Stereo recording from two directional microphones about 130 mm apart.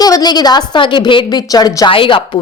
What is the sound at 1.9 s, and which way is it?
Speech, 40° left (ahead or behind).